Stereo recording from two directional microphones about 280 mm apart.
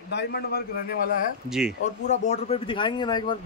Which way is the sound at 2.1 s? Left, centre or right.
Left.